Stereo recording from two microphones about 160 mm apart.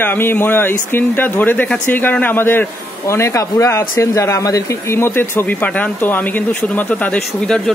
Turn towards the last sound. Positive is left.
turn(degrees=5)  # may be behind; listen again after turning